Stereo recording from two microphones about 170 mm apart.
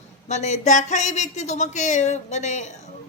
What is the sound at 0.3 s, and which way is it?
Speech, 45° left (ahead or behind).